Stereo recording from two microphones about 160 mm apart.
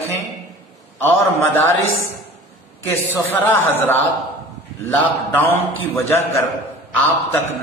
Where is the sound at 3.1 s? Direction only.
15° left (ahead or behind).